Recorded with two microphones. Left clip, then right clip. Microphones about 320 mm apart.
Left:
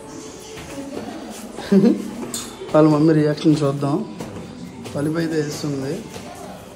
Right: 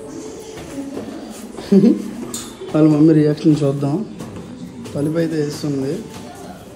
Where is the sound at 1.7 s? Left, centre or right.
Centre.